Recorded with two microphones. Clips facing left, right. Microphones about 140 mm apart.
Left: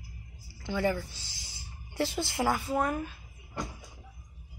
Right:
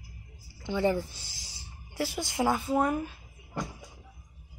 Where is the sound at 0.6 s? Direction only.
20° right (ahead or behind).